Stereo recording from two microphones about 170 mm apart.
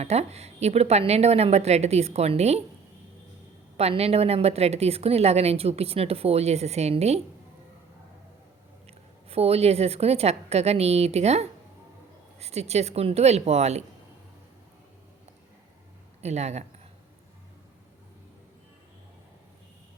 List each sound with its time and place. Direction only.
0.0 s a woman's voice: 40° right (ahead or behind)
3.8 s a woman's voice: 35° right (ahead or behind)
9.3 s a woman's voice: 35° right (ahead or behind)
16.2 s a woman's voice: 40° right (ahead or behind)